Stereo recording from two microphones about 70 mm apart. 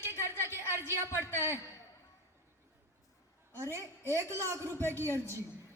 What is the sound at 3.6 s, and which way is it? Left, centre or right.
A woman's voice, right.